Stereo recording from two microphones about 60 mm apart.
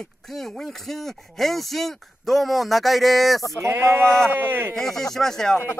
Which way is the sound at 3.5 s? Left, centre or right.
Right.